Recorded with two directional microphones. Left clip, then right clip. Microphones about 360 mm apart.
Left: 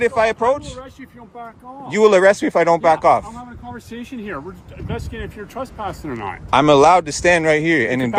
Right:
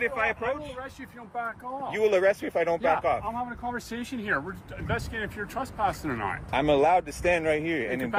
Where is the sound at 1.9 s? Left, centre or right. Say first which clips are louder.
Left 11 dB; left.